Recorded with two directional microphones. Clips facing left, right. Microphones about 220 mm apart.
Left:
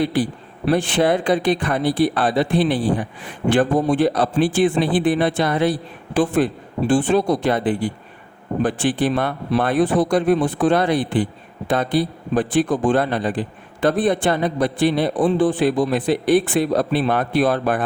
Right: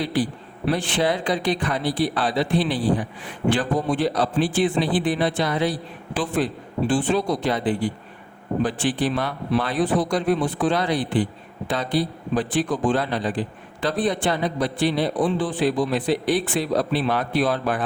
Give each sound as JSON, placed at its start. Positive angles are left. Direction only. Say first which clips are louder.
{"t": 0.0, "sound": "a man's voice", "louder": "left 4 dB", "side_deg": 50}